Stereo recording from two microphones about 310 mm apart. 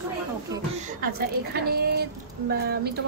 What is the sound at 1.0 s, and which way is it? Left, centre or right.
A woman's voice, right.